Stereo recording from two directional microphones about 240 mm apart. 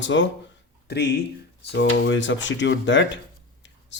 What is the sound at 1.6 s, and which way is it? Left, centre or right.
Speech, left.